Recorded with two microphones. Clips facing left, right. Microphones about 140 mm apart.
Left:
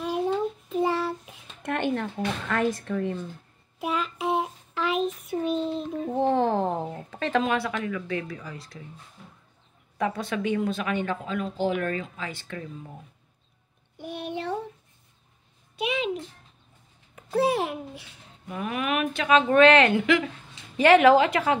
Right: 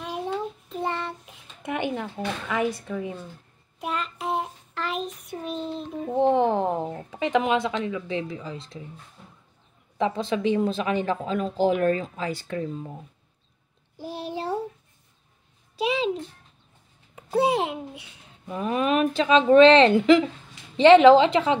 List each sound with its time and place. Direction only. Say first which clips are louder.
0.0 s child singing: left 4 dB; centre (ahead or behind)
1.6 s speech: left 1 dB; 10° right (ahead or behind)
3.8 s child singing: left 2 dB; centre (ahead or behind)
6.1 s a sound: right 3 dB; 20° right (ahead or behind)
9.9 s speech: right 3 dB; 25° right (ahead or behind)
13.9 s a child's voice: right 1 dB; 30° right (ahead or behind)
15.7 s a child's voice: right 3 dB; 30° right (ahead or behind)